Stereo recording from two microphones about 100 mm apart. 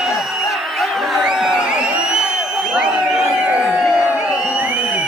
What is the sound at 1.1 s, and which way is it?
Crowd, 5° right (ahead or behind).